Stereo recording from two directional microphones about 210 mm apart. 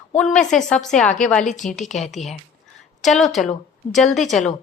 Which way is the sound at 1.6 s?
35° left (ahead or behind).